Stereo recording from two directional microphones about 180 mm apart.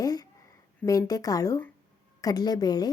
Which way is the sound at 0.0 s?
20° left (ahead or behind).